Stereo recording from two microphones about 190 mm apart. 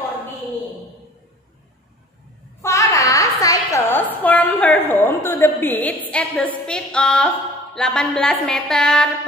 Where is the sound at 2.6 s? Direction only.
15° left (ahead or behind).